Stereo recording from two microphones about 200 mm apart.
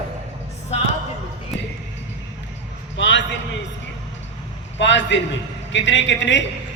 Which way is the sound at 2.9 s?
65° left (ahead or behind).